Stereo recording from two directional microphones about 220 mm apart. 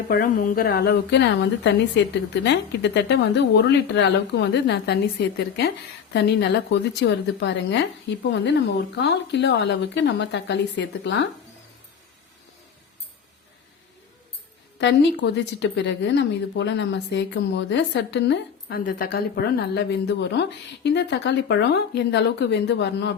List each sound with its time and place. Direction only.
0.1 s speech: 40° left (ahead or behind)
14.8 s speech: 55° left (ahead or behind)